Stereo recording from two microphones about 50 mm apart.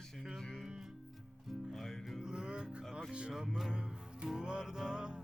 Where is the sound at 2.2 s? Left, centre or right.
Centre.